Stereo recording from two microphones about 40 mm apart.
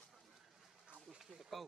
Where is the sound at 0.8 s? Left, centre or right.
Right.